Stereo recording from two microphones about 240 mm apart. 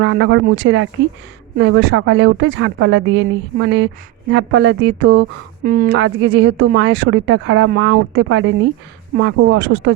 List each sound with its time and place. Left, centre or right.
0.0 s speech: right
6.0 s speech: right